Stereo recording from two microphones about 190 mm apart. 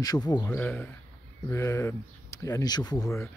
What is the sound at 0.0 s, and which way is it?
Speech, 20° left (ahead or behind).